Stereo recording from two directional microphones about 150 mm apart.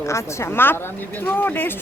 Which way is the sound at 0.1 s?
15° left (ahead or behind).